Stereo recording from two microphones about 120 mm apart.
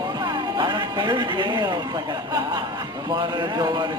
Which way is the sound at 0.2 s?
35° right (ahead or behind).